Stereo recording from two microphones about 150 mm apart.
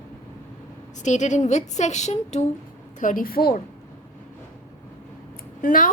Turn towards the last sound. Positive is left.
turn(degrees=65)  # may be behind; listen again after turning